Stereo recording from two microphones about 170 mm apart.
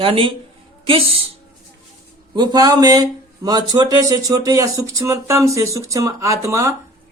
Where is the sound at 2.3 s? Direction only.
25° right (ahead or behind).